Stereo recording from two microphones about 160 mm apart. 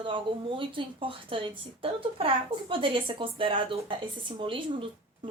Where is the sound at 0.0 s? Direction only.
30° right (ahead or behind).